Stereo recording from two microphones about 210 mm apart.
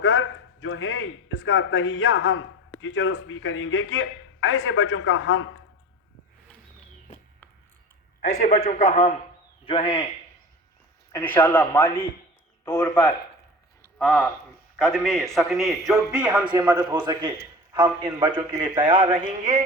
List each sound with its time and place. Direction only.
0.0 s a man's voice: 70° left (ahead or behind)
8.2 s a man's voice: 45° left (ahead or behind)
8.5 s a man's voice: 35° left (ahead or behind)
11.1 s a man's voice: 10° left (ahead or behind)
16.4 s a man's voice: 20° right (ahead or behind)
19.4 s music: 35° right (ahead or behind)